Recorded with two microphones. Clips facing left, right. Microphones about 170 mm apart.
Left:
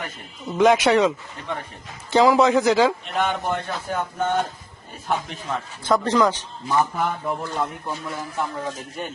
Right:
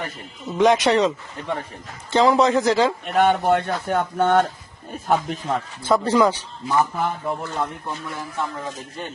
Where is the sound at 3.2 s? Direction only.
55° right (ahead or behind).